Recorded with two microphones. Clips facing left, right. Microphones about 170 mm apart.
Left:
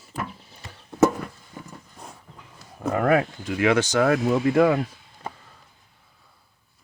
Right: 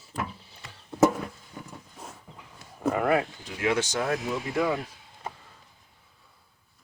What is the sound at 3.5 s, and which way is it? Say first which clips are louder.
Speech: left 8 dB; 90° left.